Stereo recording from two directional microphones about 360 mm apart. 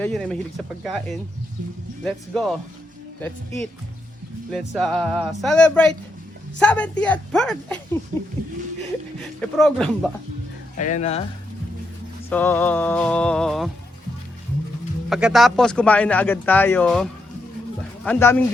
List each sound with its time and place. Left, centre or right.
0.0 s speech: centre
9.4 s speech: centre
10.8 s speech: left
12.3 s speech: centre
15.1 s speech: centre